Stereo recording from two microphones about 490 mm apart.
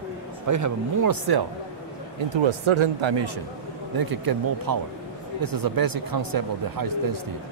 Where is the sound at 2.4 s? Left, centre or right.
Right.